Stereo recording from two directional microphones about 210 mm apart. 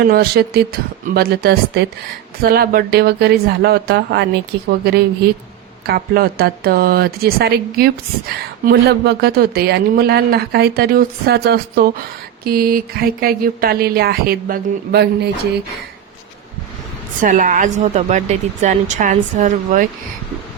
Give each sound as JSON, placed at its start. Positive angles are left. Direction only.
{"t": 0.0, "sound": "speech", "side_deg": -45}
{"t": 17.2, "sound": "a woman's voice", "side_deg": -40}